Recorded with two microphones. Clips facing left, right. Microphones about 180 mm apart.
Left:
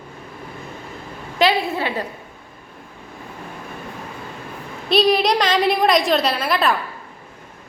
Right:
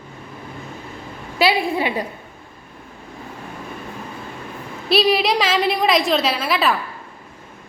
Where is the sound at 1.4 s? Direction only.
10° right (ahead or behind).